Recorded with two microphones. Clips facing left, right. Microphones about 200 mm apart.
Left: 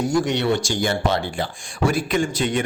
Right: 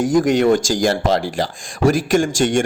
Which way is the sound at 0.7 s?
90° right.